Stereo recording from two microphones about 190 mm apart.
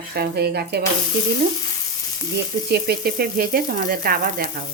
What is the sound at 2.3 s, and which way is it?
Frying, 60° right (ahead or behind).